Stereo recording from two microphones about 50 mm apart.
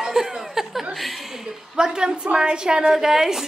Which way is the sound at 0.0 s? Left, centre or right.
Centre.